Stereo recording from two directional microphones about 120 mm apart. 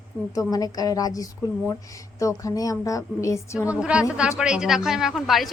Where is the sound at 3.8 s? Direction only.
10° right (ahead or behind).